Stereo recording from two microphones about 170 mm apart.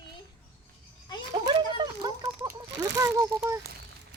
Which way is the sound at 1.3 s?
25° right (ahead or behind).